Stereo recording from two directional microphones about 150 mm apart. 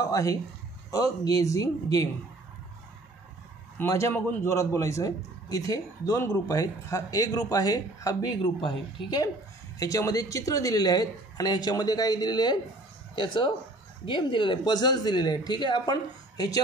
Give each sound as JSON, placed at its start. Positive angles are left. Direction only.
{"t": 0.0, "sound": "a man's voice", "side_deg": 25}
{"t": 3.7, "sound": "a man's voice", "side_deg": 20}